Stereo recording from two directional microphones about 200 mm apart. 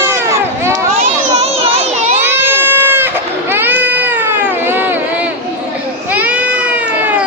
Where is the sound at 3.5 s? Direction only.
10° right (ahead or behind).